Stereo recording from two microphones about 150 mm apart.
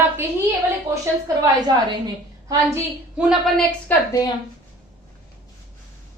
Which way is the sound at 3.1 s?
5° right (ahead or behind).